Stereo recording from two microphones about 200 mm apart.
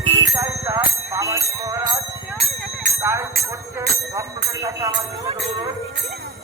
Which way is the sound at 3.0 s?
15° right (ahead or behind).